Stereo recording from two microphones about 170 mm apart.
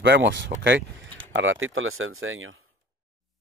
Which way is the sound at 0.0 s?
90° right.